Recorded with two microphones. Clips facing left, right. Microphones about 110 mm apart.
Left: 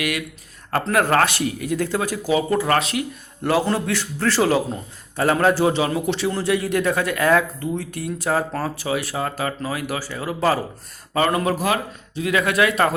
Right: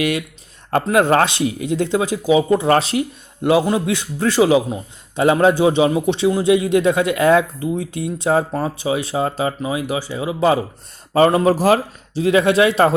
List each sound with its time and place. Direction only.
0.0 s a man's voice: 30° right (ahead or behind)
2.6 s speech: 30° right (ahead or behind)
3.4 s a man's voice: 15° right (ahead or behind)
11.1 s a man's voice: 30° right (ahead or behind)